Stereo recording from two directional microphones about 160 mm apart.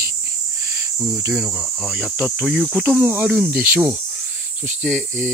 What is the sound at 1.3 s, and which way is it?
Speech, 5° right (ahead or behind).